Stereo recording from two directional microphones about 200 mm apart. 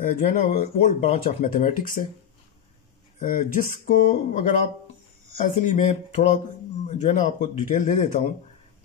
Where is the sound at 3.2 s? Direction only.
40° left (ahead or behind).